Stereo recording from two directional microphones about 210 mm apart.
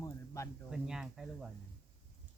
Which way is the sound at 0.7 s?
Centre (ahead or behind).